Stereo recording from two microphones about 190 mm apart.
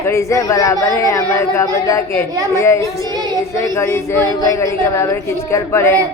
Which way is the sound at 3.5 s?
15° left (ahead or behind).